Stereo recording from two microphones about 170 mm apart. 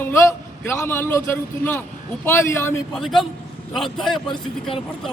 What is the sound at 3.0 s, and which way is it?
A man's voice, centre (ahead or behind).